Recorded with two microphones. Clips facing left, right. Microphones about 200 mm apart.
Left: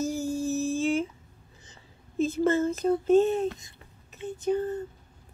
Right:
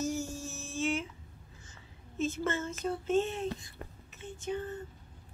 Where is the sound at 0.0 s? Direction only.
35° left (ahead or behind).